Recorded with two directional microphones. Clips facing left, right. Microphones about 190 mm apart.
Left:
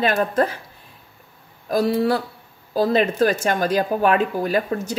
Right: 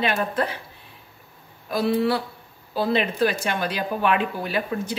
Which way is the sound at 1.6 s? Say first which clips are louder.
Left 3 dB; 40° left (ahead or behind).